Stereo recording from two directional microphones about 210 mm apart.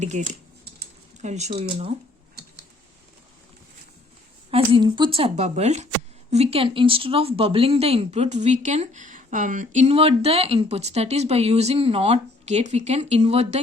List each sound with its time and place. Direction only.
0.0 s speech: 35° right (ahead or behind)
4.5 s speech: 25° right (ahead or behind)